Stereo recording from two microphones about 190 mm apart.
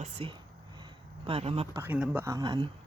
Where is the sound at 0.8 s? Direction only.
30° right (ahead or behind).